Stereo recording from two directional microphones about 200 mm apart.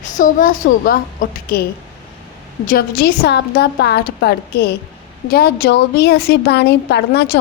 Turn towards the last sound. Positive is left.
turn(degrees=55)  # may be behind; listen again after turning